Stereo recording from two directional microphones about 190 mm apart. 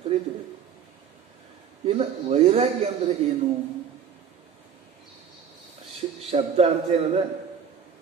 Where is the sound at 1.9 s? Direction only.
30° right (ahead or behind).